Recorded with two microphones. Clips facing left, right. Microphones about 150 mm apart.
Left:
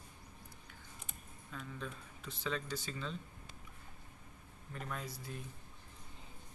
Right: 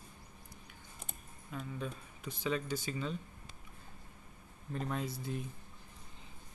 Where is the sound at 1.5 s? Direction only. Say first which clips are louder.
Right 4 dB; 15° right (ahead or behind).